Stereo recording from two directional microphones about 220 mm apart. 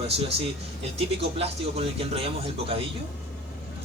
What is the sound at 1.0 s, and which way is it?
Speech, 25° right (ahead or behind).